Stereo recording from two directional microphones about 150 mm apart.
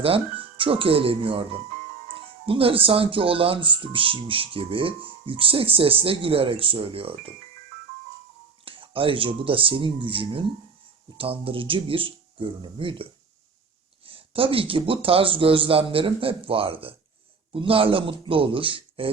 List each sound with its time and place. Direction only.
0.0 s speech: 40° right (ahead or behind)
2.5 s speech: 40° right (ahead or behind)
8.6 s speech: 35° right (ahead or behind)
14.1 s speech: 35° right (ahead or behind)